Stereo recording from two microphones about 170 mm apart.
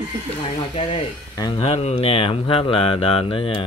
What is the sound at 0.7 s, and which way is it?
Speech, 30° left (ahead or behind).